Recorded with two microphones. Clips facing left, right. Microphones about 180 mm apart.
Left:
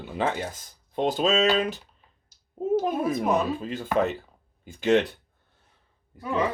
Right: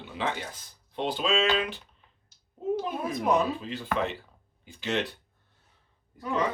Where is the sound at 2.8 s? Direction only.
45° left (ahead or behind).